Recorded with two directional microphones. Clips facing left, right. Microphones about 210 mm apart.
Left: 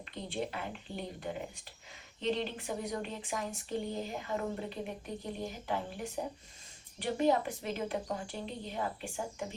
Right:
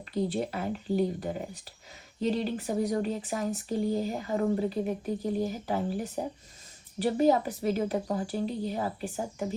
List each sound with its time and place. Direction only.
0.1 s speech: 40° right (ahead or behind)